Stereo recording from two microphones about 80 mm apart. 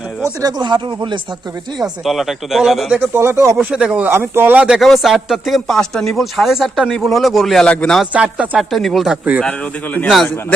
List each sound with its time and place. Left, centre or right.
0.6 s speech: right
1.8 s a man's voice: centre
3.2 s speech: right
3.6 s speech: centre
4.1 s speech: right
4.8 s a man's voice: centre
8.1 s speech: centre
8.5 s a man's voice: centre
9.0 s speech: centre
9.4 s a man's voice: centre